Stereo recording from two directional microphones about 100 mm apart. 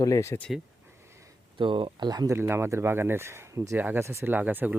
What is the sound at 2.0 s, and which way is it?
Speech, 40° right (ahead or behind).